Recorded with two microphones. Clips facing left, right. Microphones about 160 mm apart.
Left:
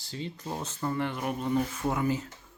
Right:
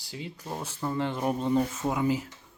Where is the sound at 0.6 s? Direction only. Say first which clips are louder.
Even; 10° right (ahead or behind).